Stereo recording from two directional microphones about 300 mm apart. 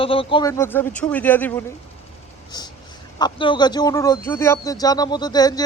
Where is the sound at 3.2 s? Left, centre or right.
Centre.